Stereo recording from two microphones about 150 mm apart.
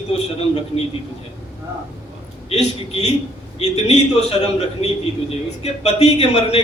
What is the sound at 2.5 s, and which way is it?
A man's voice, 45° left (ahead or behind).